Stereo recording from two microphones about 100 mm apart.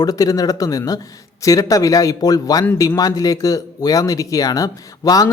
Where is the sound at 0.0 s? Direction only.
35° left (ahead or behind).